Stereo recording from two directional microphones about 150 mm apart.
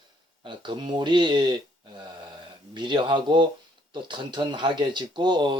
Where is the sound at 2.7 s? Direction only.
35° right (ahead or behind).